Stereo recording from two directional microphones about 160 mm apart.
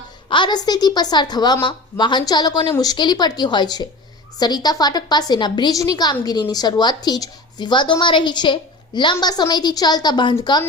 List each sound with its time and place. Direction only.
0.3 s a woman's voice: 30° left (ahead or behind)